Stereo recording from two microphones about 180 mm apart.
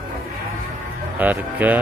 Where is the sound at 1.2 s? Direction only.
10° right (ahead or behind).